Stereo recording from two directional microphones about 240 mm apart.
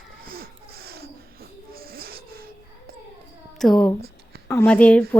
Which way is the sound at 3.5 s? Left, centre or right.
Centre.